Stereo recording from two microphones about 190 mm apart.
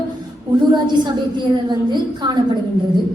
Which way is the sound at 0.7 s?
20° right (ahead or behind).